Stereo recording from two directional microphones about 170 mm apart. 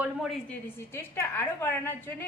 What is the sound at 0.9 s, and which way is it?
A woman's voice, 15° left (ahead or behind).